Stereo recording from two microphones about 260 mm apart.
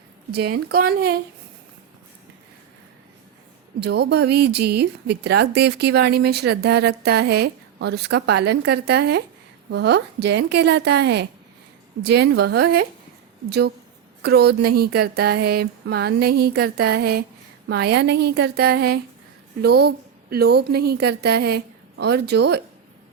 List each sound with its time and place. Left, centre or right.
0.3 s speech: right
3.8 s speech: right